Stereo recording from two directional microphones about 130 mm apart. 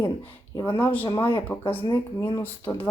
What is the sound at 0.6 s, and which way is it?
Speech, 15° left (ahead or behind).